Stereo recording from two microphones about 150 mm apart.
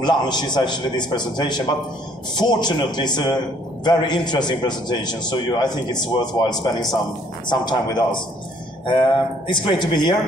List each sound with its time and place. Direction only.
0.0 s a man's voice: 30° left (ahead or behind)